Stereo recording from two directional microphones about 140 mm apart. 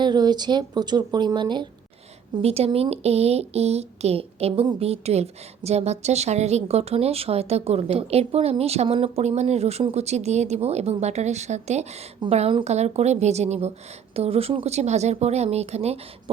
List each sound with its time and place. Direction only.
0.0 s speech: 30° right (ahead or behind)
2.3 s a woman's voice: 45° right (ahead or behind)